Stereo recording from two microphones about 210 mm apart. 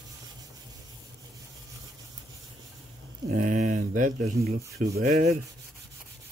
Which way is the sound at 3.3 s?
40° right (ahead or behind).